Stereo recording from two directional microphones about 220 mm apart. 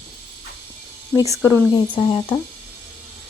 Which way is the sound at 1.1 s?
15° right (ahead or behind).